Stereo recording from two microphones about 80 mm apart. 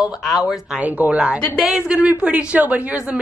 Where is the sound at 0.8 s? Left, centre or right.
Centre.